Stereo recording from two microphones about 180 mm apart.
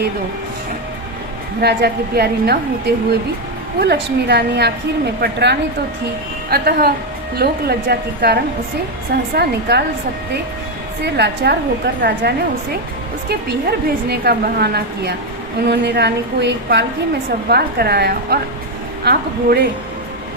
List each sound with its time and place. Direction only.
1.6 s a woman's voice: 60° right (ahead or behind)
11.0 s a woman's voice: 70° right (ahead or behind)